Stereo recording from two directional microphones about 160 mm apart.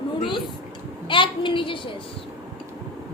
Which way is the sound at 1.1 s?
30° left (ahead or behind).